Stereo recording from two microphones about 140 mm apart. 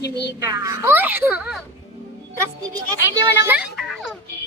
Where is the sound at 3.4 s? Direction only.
10° right (ahead or behind).